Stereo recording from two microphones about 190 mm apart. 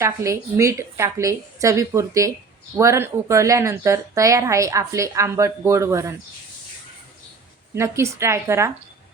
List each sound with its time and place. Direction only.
0.0 s speech: 15° right (ahead or behind)
7.8 s speech: 15° right (ahead or behind)